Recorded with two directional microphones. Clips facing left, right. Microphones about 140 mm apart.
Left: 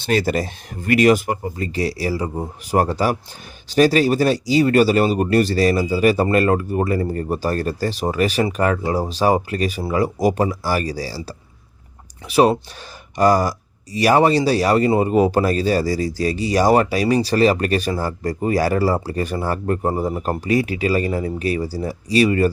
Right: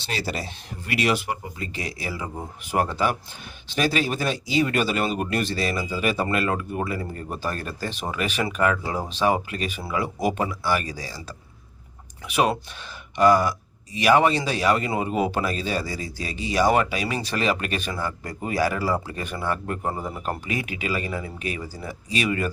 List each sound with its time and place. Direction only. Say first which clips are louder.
0.0 s speech: left 10 dB; 50° left (ahead or behind); by 22.4 s 35° left (ahead or behind)